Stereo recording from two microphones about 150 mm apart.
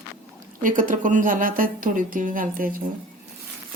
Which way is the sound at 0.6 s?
60° right (ahead or behind).